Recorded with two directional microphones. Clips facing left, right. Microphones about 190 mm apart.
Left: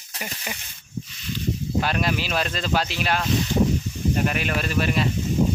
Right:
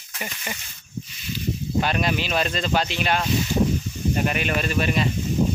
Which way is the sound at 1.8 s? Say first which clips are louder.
Right 2 dB; centre (ahead or behind).